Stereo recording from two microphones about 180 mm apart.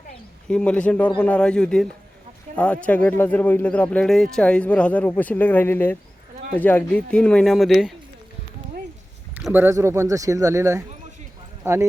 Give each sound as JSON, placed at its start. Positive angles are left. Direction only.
{"t": 0.4, "sound": "speech", "side_deg": 5}
{"t": 9.4, "sound": "speech", "side_deg": -10}